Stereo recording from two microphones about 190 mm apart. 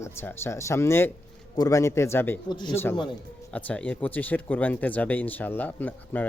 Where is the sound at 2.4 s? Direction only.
25° left (ahead or behind).